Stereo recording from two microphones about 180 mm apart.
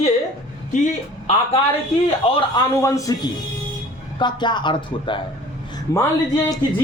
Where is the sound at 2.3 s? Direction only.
30° left (ahead or behind).